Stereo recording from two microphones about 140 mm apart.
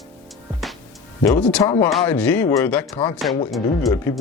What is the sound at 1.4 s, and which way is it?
Speech, 10° left (ahead or behind).